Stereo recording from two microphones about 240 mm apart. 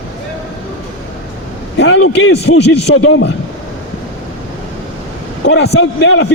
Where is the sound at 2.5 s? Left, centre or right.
Left.